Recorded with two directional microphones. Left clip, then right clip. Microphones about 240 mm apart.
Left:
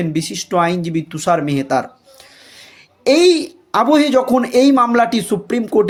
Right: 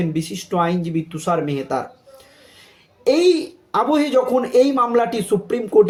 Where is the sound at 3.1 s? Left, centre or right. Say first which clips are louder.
Left 4 dB; left.